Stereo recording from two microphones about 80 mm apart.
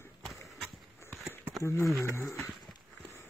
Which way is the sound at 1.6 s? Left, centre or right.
Left.